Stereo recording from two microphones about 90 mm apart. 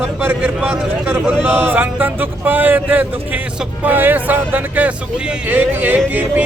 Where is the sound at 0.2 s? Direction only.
15° right (ahead or behind).